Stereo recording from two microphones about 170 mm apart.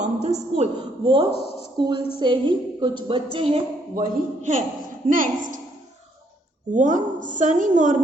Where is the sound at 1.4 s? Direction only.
75° left (ahead or behind).